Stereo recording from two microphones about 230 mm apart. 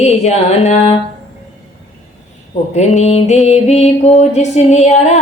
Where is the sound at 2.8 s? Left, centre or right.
Left.